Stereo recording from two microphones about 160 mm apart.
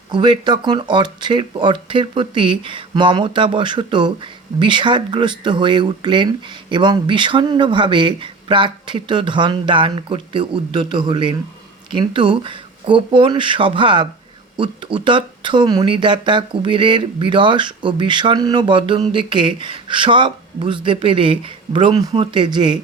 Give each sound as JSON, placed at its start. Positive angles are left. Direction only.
{"t": 0.1, "sound": "speech", "side_deg": -30}